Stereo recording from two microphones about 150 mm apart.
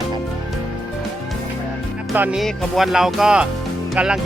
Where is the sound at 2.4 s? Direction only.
Centre (ahead or behind).